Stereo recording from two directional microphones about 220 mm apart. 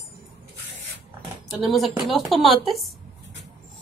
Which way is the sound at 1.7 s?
Centre (ahead or behind).